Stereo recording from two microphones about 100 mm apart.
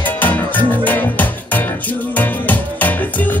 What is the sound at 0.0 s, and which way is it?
Music, 15° left (ahead or behind).